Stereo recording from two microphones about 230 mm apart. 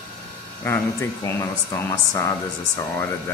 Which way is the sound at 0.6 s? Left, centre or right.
Centre.